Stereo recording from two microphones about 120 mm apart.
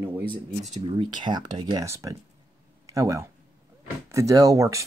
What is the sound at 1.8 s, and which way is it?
Speech, 25° right (ahead or behind).